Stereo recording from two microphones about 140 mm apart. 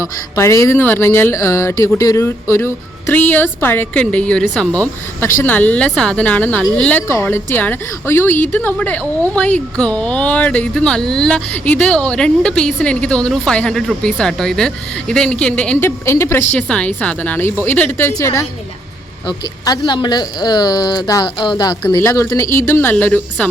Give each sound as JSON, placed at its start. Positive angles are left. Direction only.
{"t": 0.0, "sound": "speech", "side_deg": 20}
{"t": 16.0, "sound": "speech", "side_deg": 20}
{"t": 16.5, "sound": "speech", "side_deg": 10}